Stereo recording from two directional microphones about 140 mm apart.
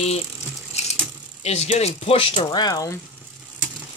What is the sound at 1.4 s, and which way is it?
Speech, 50° left (ahead or behind).